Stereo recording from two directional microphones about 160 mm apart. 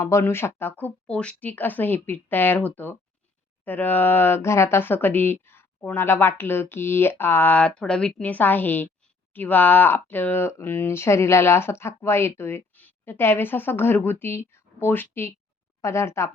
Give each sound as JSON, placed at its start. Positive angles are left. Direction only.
{"t": 0.0, "sound": "speech", "side_deg": 15}